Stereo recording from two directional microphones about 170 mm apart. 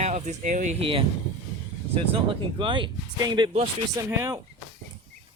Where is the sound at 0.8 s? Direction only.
30° right (ahead or behind).